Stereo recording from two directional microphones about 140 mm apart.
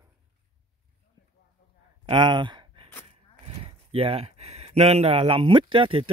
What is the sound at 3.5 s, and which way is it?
Speech, 45° right (ahead or behind).